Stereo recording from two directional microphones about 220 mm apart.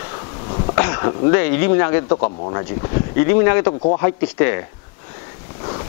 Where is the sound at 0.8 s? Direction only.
20° left (ahead or behind).